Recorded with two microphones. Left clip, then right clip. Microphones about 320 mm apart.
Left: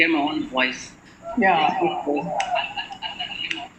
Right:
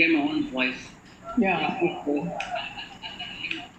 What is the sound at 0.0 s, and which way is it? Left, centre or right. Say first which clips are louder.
A man's voice: left 2 dB; left.